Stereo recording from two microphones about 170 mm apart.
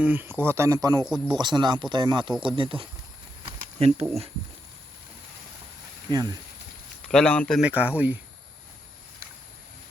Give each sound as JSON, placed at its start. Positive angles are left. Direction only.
{"t": 0.0, "sound": "speech", "side_deg": -10}
{"t": 3.4, "sound": "a sound", "side_deg": -35}
{"t": 6.1, "sound": "speech", "side_deg": -25}
{"t": 7.1, "sound": "speech", "side_deg": 5}
{"t": 7.6, "sound": "speech", "side_deg": -10}